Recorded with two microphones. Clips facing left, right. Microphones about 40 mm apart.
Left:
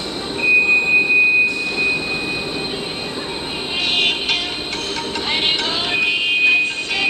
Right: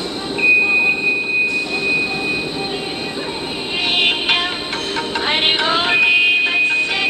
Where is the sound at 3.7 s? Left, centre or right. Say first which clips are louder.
Right 2 dB; centre.